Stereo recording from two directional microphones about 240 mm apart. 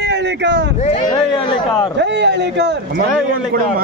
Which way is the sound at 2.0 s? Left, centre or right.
Right.